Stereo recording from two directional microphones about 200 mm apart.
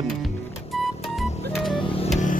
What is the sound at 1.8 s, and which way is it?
Music, 25° left (ahead or behind).